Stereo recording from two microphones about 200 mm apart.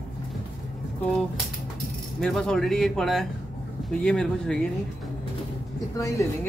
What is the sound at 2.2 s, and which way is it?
Speech, centre (ahead or behind).